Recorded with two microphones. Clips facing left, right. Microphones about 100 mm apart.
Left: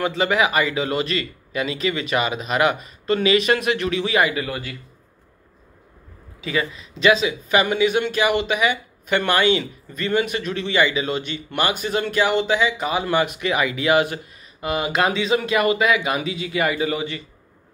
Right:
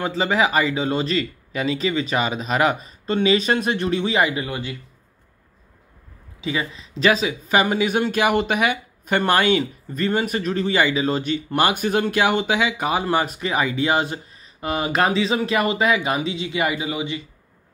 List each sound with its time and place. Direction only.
0.1 s a man's voice: 35° right (ahead or behind)
6.4 s speech: 25° right (ahead or behind); by 13.0 s 50° right (ahead or behind)
13.0 s speech: 35° right (ahead or behind); by 17.2 s 15° right (ahead or behind)